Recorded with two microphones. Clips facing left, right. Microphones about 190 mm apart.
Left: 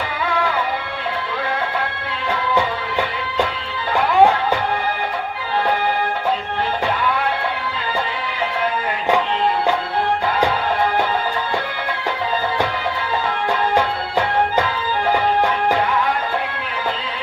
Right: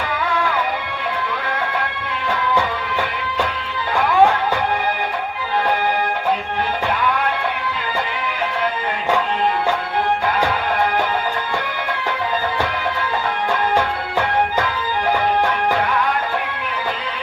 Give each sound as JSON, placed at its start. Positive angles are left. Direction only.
{"t": 3.9, "sound": "music", "side_deg": 15}
{"t": 13.5, "sound": "music", "side_deg": 15}